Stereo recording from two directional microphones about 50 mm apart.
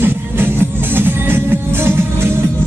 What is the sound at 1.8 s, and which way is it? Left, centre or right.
Music, right.